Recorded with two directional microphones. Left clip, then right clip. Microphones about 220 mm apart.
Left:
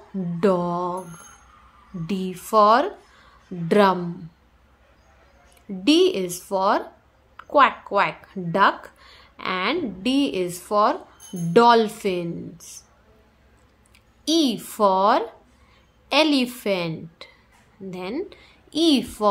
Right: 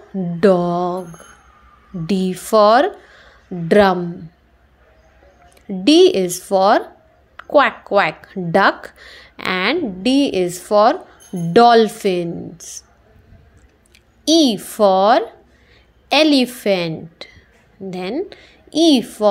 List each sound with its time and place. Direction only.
0.4 s speech: 15° right (ahead or behind)
2.0 s a woman's voice: 20° right (ahead or behind)
5.9 s speech: 15° right (ahead or behind)
14.2 s speech: 15° right (ahead or behind)